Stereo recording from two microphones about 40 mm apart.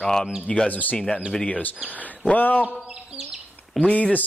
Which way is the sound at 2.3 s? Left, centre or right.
Left.